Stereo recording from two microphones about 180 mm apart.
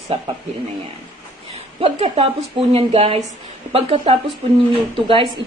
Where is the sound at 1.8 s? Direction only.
35° right (ahead or behind).